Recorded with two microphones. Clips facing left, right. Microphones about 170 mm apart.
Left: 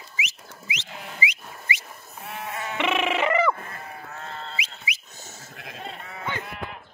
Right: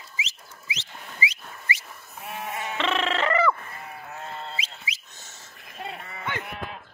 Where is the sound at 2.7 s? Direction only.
15° left (ahead or behind).